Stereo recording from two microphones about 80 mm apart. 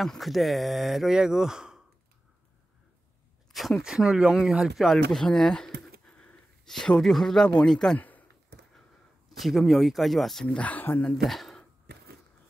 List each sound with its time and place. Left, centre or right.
0.0 s speech: centre
3.5 s speech: centre
8.0 s a sound: left
9.4 s speech: centre
11.1 s speech: centre